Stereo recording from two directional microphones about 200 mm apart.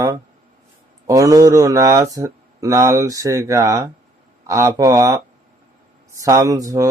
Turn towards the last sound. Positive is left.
turn(degrees=-15)  # may be behind; listen again after turning